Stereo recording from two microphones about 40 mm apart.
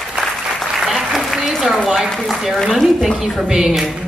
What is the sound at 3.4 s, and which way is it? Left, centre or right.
Speech, centre.